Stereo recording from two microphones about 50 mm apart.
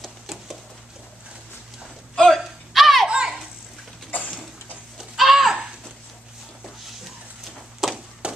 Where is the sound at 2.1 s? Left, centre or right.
Centre.